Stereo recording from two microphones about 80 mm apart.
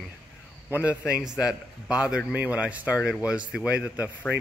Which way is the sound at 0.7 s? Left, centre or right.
Centre.